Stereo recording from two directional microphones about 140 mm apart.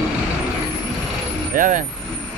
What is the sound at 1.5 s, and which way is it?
Speech, 70° right (ahead or behind).